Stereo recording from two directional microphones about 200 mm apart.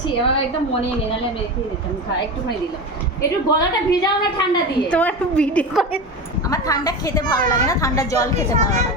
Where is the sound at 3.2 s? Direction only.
20° left (ahead or behind).